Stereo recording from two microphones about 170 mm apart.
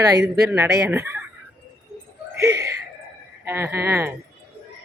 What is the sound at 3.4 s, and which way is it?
Speech, 15° right (ahead or behind).